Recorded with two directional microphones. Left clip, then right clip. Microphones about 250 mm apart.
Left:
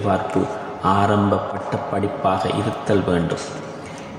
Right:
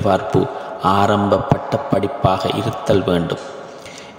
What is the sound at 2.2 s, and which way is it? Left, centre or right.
Speech, right.